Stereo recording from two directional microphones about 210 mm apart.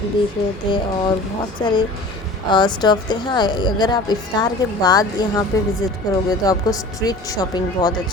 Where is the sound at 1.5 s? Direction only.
20° left (ahead or behind).